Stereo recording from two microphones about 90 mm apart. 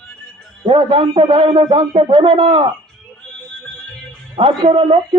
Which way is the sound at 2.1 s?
90° right.